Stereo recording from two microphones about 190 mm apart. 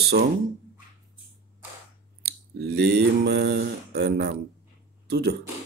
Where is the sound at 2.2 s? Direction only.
60° right (ahead or behind).